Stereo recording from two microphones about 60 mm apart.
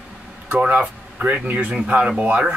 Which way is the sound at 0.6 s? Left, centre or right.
Centre.